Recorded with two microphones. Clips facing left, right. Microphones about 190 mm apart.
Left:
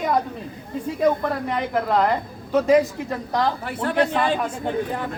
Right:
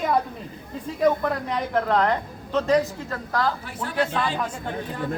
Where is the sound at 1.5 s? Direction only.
5° left (ahead or behind).